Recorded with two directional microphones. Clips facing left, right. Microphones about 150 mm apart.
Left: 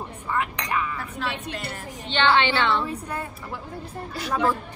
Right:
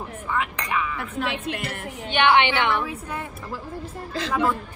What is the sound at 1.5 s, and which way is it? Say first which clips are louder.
Speech: right 4 dB; 90° right.